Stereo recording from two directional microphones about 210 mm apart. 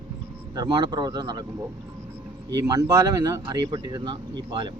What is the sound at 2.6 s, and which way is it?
Speech, 15° right (ahead or behind).